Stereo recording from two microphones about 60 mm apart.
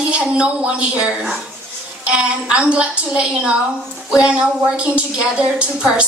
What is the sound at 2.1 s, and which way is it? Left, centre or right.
A woman's voice, centre.